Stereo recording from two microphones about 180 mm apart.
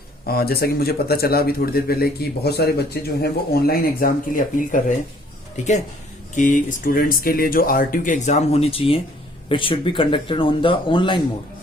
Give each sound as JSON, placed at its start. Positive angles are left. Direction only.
{"t": 0.3, "sound": "a man's voice", "side_deg": 60}
{"t": 6.3, "sound": "speech", "side_deg": 45}